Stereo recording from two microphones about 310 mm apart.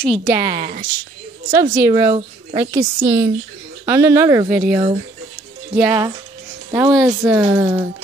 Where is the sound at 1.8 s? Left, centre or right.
Centre.